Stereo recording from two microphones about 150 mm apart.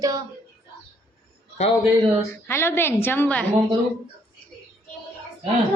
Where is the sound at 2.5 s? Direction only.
15° left (ahead or behind).